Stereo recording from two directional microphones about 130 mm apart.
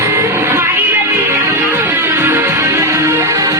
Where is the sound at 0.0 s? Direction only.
20° right (ahead or behind).